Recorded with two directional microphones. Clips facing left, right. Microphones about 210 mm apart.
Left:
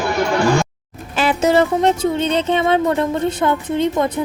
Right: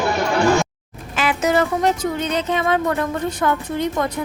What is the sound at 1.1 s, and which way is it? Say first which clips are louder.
Speech: left 4 dB; 30° left (ahead or behind).